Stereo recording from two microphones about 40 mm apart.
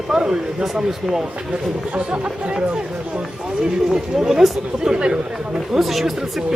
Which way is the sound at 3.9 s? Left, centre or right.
Centre.